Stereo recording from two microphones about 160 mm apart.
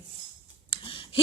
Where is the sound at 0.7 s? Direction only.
35° left (ahead or behind).